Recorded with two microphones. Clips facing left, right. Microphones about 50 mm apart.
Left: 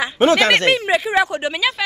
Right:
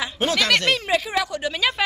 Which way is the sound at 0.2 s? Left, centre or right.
Left.